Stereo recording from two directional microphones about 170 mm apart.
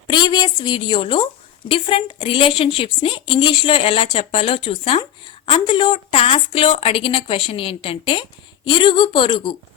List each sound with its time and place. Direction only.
0.1 s a woman's voice: 25° left (ahead or behind)